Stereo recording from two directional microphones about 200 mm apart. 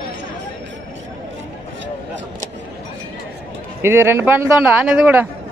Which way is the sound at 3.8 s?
10° right (ahead or behind).